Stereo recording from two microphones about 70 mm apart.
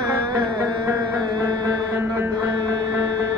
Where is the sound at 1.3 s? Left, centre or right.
Right.